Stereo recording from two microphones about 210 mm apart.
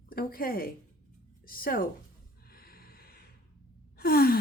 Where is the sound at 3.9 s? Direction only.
45° left (ahead or behind).